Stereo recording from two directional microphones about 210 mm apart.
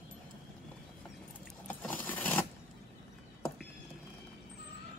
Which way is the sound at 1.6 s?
5° left (ahead or behind).